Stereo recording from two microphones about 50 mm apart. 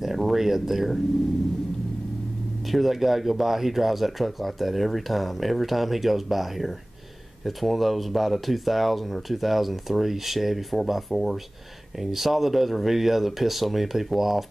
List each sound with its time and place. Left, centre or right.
0.0 s speech: centre
2.7 s speech: centre